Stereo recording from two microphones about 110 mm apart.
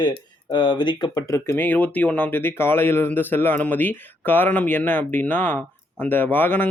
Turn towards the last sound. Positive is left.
turn(degrees=20)  # may be behind; listen again after turning